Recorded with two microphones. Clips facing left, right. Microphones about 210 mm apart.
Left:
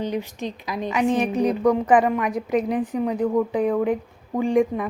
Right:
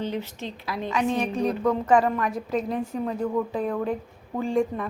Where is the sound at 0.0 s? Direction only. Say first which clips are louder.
Left 3 dB; 15° left (ahead or behind).